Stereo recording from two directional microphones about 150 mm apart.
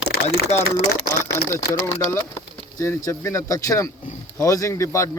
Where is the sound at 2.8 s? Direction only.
20° left (ahead or behind).